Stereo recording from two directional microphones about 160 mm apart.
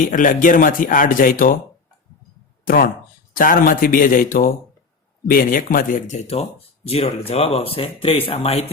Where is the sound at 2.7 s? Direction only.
65° left (ahead or behind).